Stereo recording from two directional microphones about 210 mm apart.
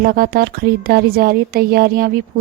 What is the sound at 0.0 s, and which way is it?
Speech, 45° right (ahead or behind).